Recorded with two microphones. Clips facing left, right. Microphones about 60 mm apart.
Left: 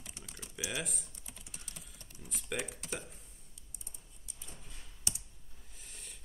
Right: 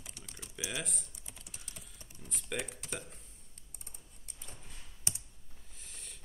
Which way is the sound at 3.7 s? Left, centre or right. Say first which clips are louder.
Right 2 dB; right.